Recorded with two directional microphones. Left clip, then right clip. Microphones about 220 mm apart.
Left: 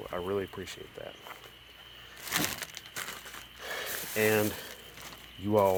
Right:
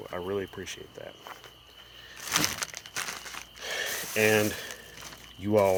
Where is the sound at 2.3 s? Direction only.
35° right (ahead or behind).